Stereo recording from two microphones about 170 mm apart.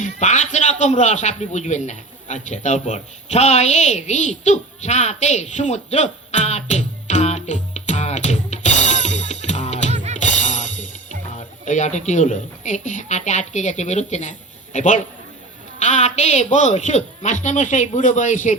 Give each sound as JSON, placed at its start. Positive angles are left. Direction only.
{"t": 0.0, "sound": "a man's voice", "side_deg": 45}
{"t": 9.9, "sound": "music", "side_deg": -40}
{"t": 10.2, "sound": "music", "side_deg": 45}
{"t": 11.3, "sound": "speech", "side_deg": 45}